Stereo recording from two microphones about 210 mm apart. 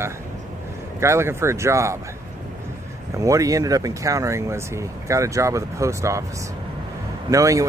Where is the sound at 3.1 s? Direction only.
15° right (ahead or behind).